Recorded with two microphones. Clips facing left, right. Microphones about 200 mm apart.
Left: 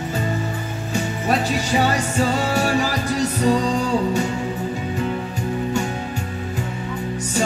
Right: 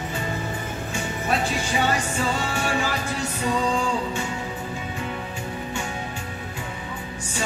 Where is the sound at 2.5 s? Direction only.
40° left (ahead or behind).